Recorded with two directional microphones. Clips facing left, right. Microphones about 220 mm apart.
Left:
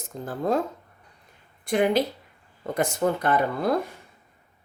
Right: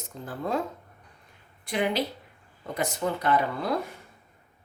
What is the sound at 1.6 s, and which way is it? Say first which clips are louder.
Speech: left 5 dB; 45° left (ahead or behind).